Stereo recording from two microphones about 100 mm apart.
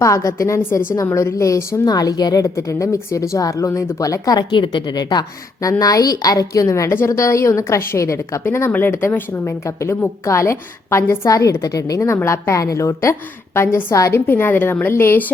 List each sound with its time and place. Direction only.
0.0 s a woman's voice: 30° left (ahead or behind)